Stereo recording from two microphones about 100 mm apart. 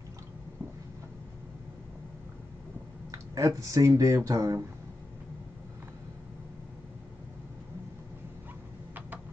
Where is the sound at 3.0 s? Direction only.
35° right (ahead or behind).